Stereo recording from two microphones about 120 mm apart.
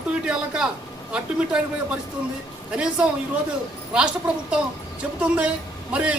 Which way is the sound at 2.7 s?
10° right (ahead or behind).